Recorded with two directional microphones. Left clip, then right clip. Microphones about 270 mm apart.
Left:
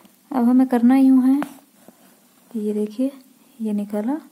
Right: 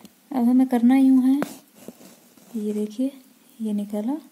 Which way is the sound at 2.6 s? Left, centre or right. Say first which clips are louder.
Left 4 dB; right.